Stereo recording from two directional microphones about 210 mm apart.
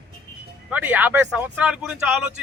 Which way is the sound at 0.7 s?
5° right (ahead or behind).